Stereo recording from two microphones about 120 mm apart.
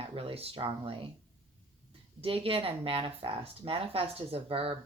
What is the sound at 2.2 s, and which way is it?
Speech, 50° right (ahead or behind).